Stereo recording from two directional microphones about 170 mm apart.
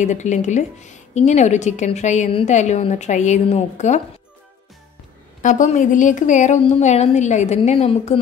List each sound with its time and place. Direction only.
0.0 s a woman's voice: 45° left (ahead or behind)
5.4 s a woman's voice: 45° left (ahead or behind)